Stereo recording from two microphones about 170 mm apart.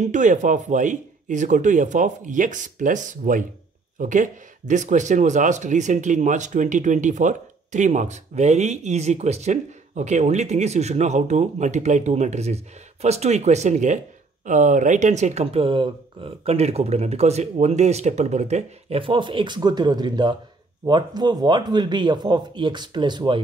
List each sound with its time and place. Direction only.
0.0 s speech: 45° right (ahead or behind); by 23.4 s 25° right (ahead or behind)